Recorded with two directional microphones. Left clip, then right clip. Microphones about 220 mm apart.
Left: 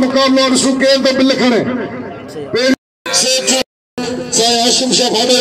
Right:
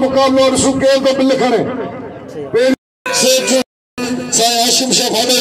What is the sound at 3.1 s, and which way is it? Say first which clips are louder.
Speech: right 1 dB; 45° right (ahead or behind).